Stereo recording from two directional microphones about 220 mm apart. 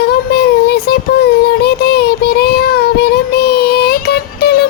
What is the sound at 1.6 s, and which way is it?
Child singing, 45° left (ahead or behind).